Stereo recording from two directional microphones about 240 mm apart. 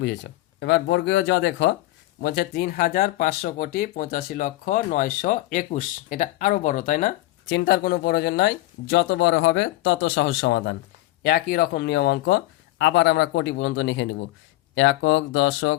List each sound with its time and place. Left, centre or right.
0.6 s speech: left
7.4 s speech: left